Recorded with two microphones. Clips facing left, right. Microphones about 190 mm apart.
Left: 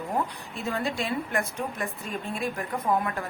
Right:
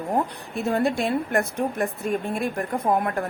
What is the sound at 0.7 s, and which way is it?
A woman's voice, 50° right (ahead or behind).